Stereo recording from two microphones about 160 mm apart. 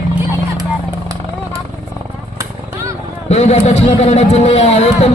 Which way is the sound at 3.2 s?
40° left (ahead or behind).